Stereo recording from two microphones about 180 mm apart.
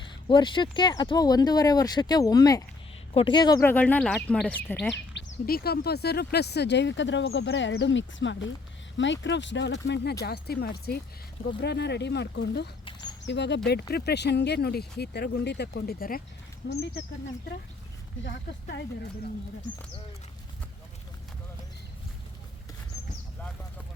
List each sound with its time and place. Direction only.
0.3 s speech: 25° left (ahead or behind); by 4.9 s 5° left (ahead or behind)
5.1 s speech: 60° left (ahead or behind)
16.6 s speech: 65° left (ahead or behind)